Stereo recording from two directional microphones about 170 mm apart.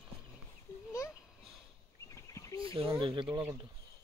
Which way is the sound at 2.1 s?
20° left (ahead or behind).